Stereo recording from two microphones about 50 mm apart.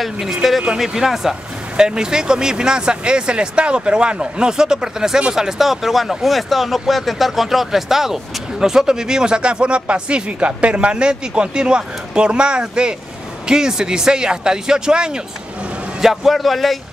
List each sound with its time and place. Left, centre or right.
0.0 s speech: centre
16.0 s speech: centre